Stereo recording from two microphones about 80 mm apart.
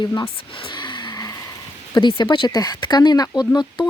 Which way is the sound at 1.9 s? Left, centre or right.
Left.